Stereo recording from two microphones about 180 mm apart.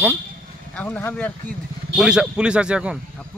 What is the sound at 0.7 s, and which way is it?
Speech, 5° left (ahead or behind).